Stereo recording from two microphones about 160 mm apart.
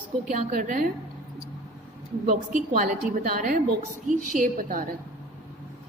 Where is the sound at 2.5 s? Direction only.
55° right (ahead or behind).